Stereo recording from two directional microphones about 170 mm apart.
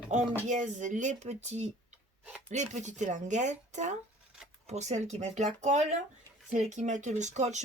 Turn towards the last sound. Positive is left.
turn(degrees=-45)  # may be behind; listen again after turning